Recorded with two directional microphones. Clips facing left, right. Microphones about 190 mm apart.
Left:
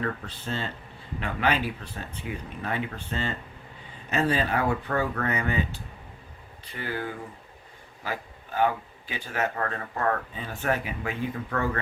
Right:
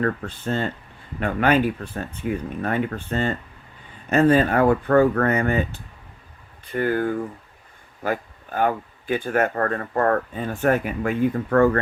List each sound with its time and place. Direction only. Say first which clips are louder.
0.0 s speech: right 7 dB; 50° right (ahead or behind)